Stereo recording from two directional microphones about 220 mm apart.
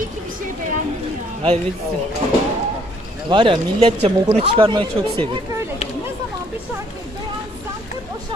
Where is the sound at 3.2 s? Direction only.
20° right (ahead or behind).